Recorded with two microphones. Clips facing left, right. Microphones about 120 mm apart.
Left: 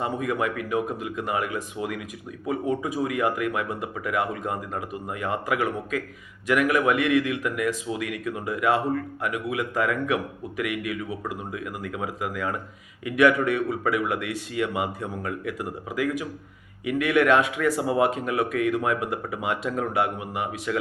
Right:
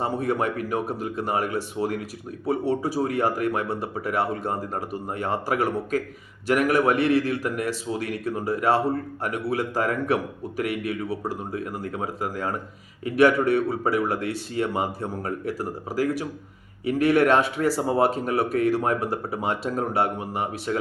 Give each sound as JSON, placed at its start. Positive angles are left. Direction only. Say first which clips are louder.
{"t": 0.0, "sound": "speech", "louder": "right 2 dB", "side_deg": -35}